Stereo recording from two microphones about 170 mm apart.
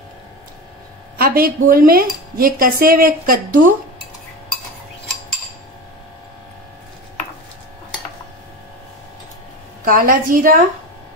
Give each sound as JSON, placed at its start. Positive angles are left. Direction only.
{"t": 1.1, "sound": "cutlery", "side_deg": -60}
{"t": 9.8, "sound": "cutlery", "side_deg": -55}